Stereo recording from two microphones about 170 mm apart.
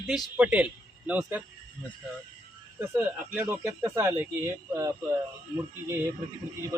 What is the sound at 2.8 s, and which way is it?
Speech, 10° right (ahead or behind).